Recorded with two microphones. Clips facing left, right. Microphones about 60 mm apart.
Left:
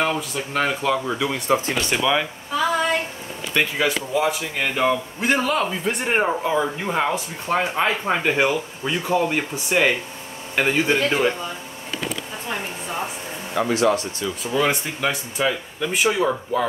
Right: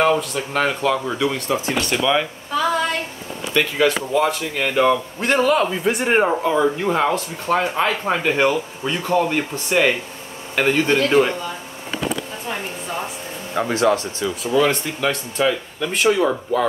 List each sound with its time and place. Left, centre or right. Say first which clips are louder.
0.0 s a man's voice: right 5 dB; centre
1.5 s speech: even; left
2.0 s a sound: right 2 dB; centre
3.5 s a man's voice: right 3 dB; centre
14.4 s speech: right 4 dB; centre